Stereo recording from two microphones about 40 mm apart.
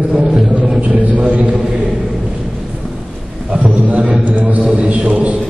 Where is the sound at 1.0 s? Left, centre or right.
Right.